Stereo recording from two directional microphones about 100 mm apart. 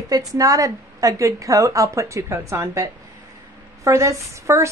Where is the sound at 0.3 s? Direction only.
35° right (ahead or behind).